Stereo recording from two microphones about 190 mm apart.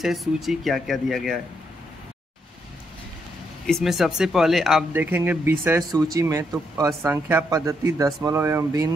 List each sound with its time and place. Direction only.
0.0 s speech: centre (ahead or behind)
3.6 s speech: centre (ahead or behind)